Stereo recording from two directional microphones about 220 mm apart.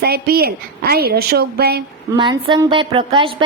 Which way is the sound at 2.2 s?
20° right (ahead or behind).